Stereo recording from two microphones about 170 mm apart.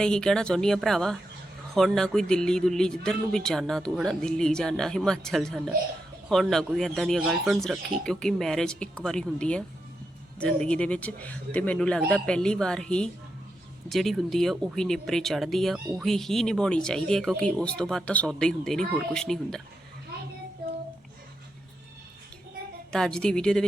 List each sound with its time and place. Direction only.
0.0 s speech: 5° left (ahead or behind)
22.9 s speech: 5° left (ahead or behind)